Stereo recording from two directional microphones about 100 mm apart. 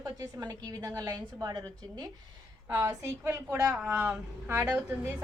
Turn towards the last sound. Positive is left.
turn(degrees=-15)  # may be behind; listen again after turning